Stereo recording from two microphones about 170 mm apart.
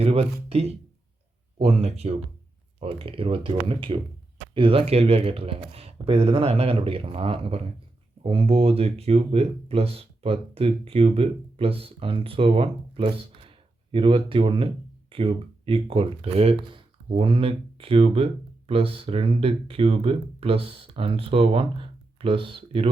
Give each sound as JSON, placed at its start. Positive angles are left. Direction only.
{"t": 0.0, "sound": "speech", "side_deg": -35}